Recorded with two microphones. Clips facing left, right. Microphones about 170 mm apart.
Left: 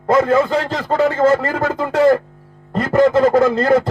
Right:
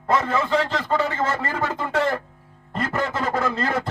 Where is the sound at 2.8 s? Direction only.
40° left (ahead or behind).